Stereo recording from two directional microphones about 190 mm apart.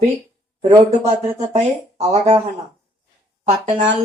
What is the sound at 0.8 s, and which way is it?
Speech, 35° right (ahead or behind).